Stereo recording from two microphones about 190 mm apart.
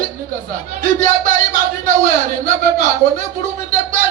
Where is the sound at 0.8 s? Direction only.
40° right (ahead or behind).